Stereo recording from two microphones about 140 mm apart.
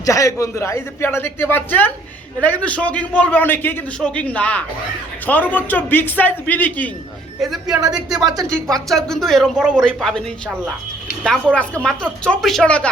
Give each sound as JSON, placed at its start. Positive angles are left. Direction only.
{"t": 0.0, "sound": "a man's voice", "side_deg": 25}
{"t": 7.4, "sound": "speech", "side_deg": 0}
{"t": 7.8, "sound": "speech", "side_deg": -25}
{"t": 8.6, "sound": "speech", "side_deg": 5}
{"t": 11.5, "sound": "a man's voice", "side_deg": 10}